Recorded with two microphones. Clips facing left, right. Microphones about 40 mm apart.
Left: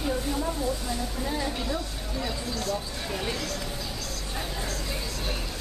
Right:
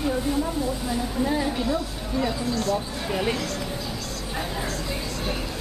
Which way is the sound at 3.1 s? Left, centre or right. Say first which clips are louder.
Right 7 dB; centre.